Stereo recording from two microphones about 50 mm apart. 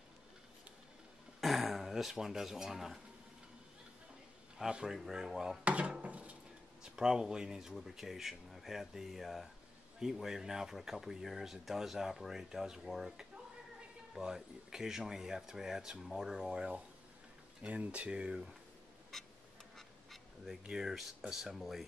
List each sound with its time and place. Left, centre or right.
1.4 s speech: centre
4.6 s speech: centre
5.6 s wood: right
6.8 s speech: centre
20.6 s speech: centre